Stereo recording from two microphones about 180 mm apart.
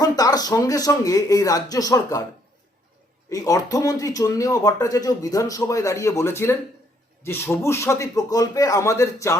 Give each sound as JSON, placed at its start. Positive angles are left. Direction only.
{"t": 0.0, "sound": "speech", "side_deg": 20}
{"t": 3.2, "sound": "speech", "side_deg": 20}